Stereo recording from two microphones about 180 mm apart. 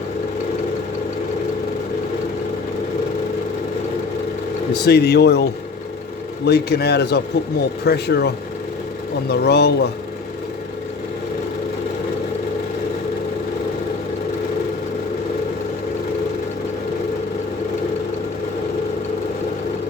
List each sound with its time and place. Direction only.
4.9 s speech: 65° left (ahead or behind)
9.3 s speech: 65° left (ahead or behind)